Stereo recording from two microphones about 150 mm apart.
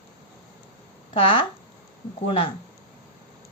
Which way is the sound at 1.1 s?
35° left (ahead or behind).